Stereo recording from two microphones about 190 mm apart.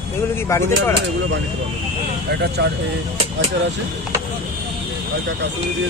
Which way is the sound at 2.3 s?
60° right (ahead or behind).